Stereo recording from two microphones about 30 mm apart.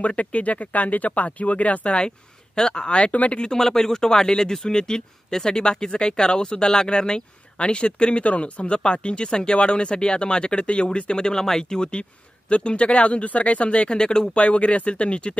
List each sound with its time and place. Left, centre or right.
0.0 s speech: left
2.0 s speech: left
3.5 s speech: centre
11.4 s speech: centre
11.8 s speech: left
13.9 s speech: left
14.3 s speech: left